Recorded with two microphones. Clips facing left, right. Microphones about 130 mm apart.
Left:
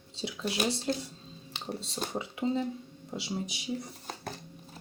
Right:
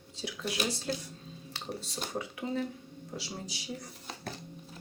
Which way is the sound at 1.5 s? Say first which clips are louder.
Left 2 dB; 20° left (ahead or behind).